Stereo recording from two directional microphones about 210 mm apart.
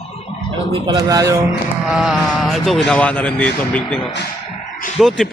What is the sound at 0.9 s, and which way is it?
Speech, 15° right (ahead or behind).